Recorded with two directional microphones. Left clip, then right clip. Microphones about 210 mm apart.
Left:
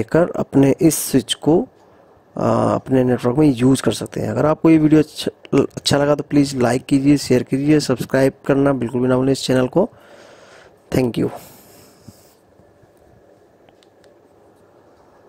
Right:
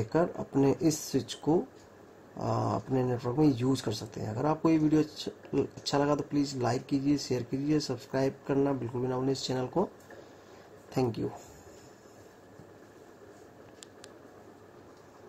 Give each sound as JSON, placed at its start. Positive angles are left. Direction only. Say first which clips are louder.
{"t": 0.1, "sound": "speech", "louder": "left 13 dB", "side_deg": 55}
{"t": 10.9, "sound": "speech", "louder": "left 12 dB", "side_deg": 55}